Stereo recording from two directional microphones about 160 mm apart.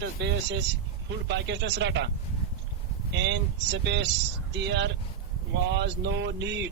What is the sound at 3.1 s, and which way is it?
Speech, 90° right.